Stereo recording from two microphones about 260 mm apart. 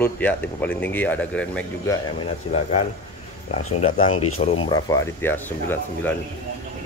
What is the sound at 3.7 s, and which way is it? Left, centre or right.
Speech, left.